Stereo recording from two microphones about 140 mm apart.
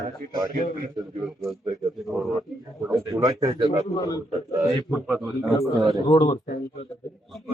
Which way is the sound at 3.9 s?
25° left (ahead or behind).